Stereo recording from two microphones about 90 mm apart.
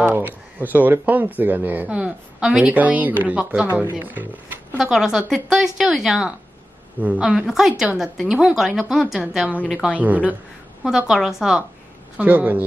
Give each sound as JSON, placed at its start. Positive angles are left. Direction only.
{"t": 0.0, "sound": "a woman's voice", "side_deg": -20}
{"t": 4.7, "sound": "a woman's voice", "side_deg": -5}
{"t": 7.0, "sound": "a woman's voice", "side_deg": -15}
{"t": 9.9, "sound": "a woman's voice", "side_deg": -15}
{"t": 10.8, "sound": "a woman's voice", "side_deg": -5}
{"t": 12.2, "sound": "speech", "side_deg": -20}